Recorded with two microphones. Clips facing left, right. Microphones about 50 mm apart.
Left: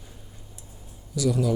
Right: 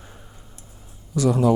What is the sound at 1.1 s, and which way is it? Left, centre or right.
Speech, right.